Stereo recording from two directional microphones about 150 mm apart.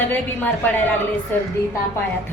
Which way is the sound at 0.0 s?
15° left (ahead or behind).